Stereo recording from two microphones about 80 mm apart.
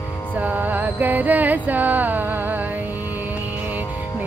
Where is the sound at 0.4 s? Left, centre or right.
Right.